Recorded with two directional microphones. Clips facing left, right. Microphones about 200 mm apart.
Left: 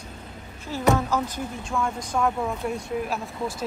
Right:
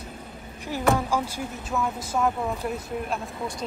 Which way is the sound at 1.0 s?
10° right (ahead or behind).